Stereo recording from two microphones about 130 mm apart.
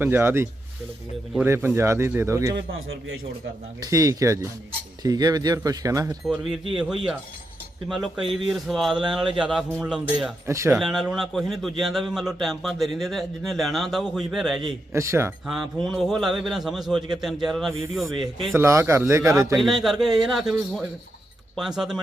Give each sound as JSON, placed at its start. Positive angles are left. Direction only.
{"t": 0.0, "sound": "a man's voice", "side_deg": -15}
{"t": 3.8, "sound": "a man's voice", "side_deg": -25}
{"t": 6.2, "sound": "a man's voice", "side_deg": -5}
{"t": 10.4, "sound": "a man's voice", "side_deg": -20}
{"t": 10.7, "sound": "a man's voice", "side_deg": -5}
{"t": 14.9, "sound": "a man's voice", "side_deg": -20}
{"t": 15.5, "sound": "a man's voice", "side_deg": 0}
{"t": 18.5, "sound": "a man's voice", "side_deg": -20}
{"t": 19.5, "sound": "a man's voice", "side_deg": 0}